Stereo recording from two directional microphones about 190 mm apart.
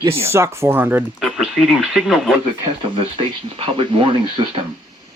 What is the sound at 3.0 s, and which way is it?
Speech, 30° right (ahead or behind).